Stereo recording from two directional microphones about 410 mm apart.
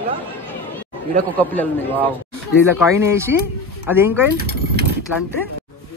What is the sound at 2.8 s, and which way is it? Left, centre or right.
Speech, centre.